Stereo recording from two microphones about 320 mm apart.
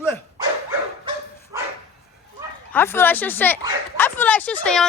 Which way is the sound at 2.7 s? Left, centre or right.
Centre.